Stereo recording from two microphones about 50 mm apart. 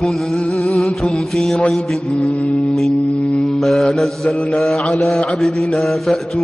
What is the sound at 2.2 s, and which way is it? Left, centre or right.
Mantra, left.